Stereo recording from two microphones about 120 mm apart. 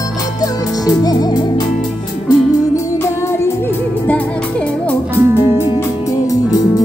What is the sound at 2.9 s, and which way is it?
Music, 25° left (ahead or behind).